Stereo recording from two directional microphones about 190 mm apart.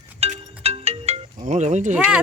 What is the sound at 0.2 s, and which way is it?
Music, 35° right (ahead or behind).